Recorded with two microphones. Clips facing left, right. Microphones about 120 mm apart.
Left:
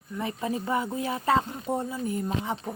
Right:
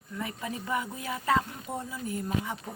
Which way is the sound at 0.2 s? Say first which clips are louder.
Left 6 dB; 30° left (ahead or behind).